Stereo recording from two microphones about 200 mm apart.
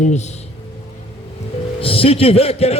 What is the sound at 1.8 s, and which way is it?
A man's voice, 30° left (ahead or behind).